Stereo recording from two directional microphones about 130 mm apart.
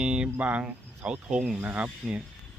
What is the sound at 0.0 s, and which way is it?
A man's voice, 10° right (ahead or behind).